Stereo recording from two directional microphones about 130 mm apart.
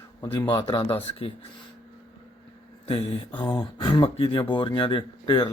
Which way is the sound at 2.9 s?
45° left (ahead or behind).